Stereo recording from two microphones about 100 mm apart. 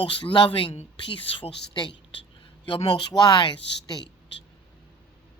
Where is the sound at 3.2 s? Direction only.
40° left (ahead or behind).